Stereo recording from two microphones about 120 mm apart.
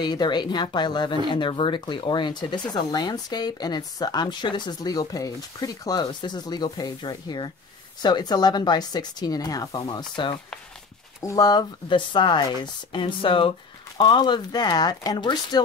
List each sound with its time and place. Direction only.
0.0 s speech: 35° left (ahead or behind)
11.1 s speech: 25° left (ahead or behind)